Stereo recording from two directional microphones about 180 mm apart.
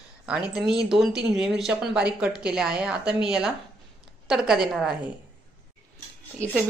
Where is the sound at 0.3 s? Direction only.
5° right (ahead or behind).